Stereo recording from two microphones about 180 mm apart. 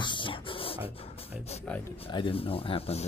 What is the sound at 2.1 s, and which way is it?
Speech, 30° left (ahead or behind).